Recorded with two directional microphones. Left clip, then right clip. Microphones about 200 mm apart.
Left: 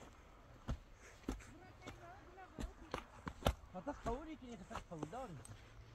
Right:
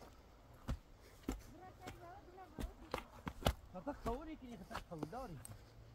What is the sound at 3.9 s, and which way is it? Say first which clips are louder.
Speech: even; 55° right (ahead or behind).